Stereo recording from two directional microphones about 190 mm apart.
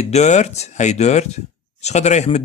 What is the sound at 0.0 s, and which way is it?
Speech, 35° left (ahead or behind).